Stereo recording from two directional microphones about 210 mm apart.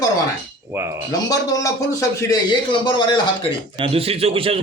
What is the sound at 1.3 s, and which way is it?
A man's voice, 15° left (ahead or behind).